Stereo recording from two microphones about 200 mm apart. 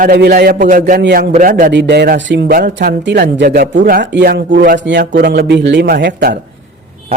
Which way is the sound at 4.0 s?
60° right (ahead or behind).